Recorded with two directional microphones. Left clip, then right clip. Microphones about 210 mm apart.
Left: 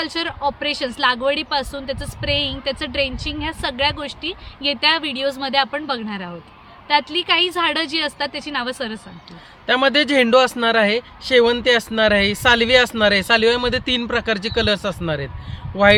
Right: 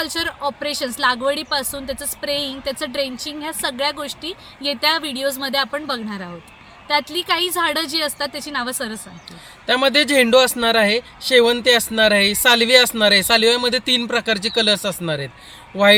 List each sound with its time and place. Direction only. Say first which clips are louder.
0.0 s a woman's voice: even; 30° left (ahead or behind)
9.6 s speech: even; 5° right (ahead or behind)